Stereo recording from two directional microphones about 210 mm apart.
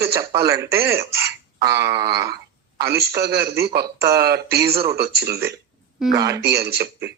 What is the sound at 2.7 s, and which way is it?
A man's voice, 50° right (ahead or behind).